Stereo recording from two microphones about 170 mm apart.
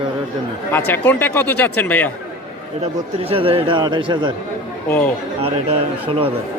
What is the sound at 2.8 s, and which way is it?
Speech, 35° right (ahead or behind).